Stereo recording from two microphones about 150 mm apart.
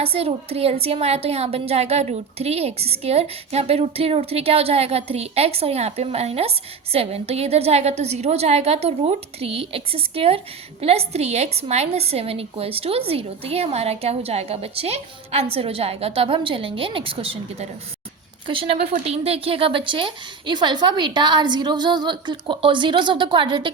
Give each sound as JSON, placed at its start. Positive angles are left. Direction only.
{"t": 0.0, "sound": "a woman's voice", "side_deg": -40}